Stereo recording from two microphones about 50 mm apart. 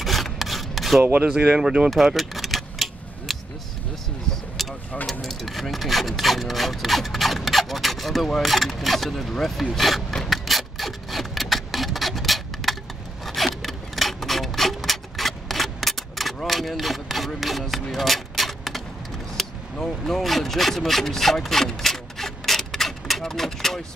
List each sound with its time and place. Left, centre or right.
0.0 s rub: centre
1.1 s speech: right
2.1 s keys jangling: centre
4.6 s vehicle: centre
5.2 s rub: centre
10.3 s a sound: centre
13.6 s rub: centre
17.4 s a sound: centre
20.1 s rub: centre